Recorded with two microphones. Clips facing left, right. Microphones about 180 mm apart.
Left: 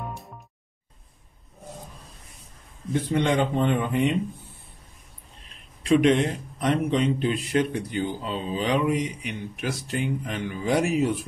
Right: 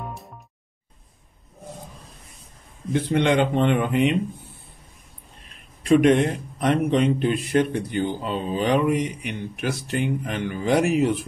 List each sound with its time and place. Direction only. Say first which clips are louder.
0.0 s music: right 1 dB; centre (ahead or behind)
2.9 s speech: right 3 dB; 70° right (ahead or behind)
5.9 s a man's voice: right 3 dB; 50° right (ahead or behind)